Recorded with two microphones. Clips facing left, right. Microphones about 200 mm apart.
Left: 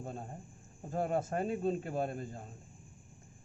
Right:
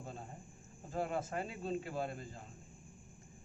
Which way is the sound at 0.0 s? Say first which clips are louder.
Left 5 dB; 50° left (ahead or behind).